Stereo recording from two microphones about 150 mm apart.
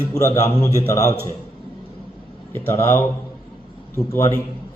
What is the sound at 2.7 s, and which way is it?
A man's voice, 15° left (ahead or behind).